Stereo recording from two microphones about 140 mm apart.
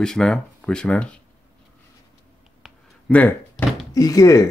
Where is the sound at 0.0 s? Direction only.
5° left (ahead or behind).